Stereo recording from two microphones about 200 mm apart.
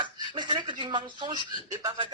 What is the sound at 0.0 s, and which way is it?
Speech, 25° right (ahead or behind).